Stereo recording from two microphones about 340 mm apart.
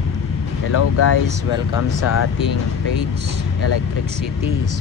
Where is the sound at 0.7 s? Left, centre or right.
Left.